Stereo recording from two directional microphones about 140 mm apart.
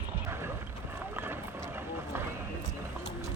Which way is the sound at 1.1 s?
15° right (ahead or behind).